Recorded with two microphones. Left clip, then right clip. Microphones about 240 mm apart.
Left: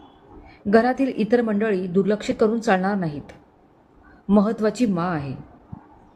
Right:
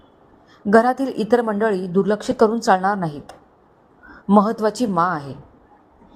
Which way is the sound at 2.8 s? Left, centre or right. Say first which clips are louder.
Right 5 dB; centre.